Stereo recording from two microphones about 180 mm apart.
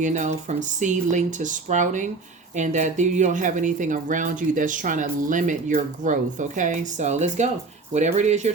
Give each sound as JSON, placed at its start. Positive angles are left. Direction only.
{"t": 0.0, "sound": "speech", "side_deg": -40}